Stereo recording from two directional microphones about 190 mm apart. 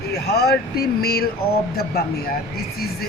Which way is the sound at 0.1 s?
60° left (ahead or behind).